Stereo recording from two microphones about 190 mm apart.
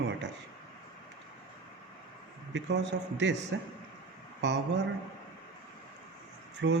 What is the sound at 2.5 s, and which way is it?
Speech, 70° right (ahead or behind).